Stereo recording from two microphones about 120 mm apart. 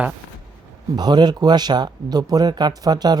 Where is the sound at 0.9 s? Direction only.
35° right (ahead or behind).